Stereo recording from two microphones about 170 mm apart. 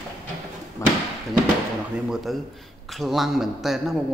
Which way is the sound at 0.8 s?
15° left (ahead or behind).